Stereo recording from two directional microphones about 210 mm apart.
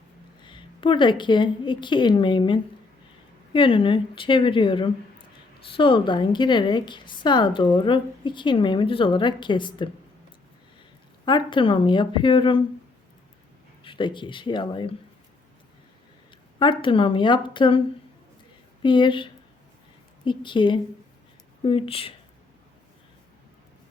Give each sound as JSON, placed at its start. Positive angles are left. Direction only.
{"t": 0.4, "sound": "a woman's voice", "side_deg": 25}
{"t": 11.3, "sound": "a woman's voice", "side_deg": 20}
{"t": 13.8, "sound": "a woman's voice", "side_deg": 25}
{"t": 16.6, "sound": "a woman's voice", "side_deg": 25}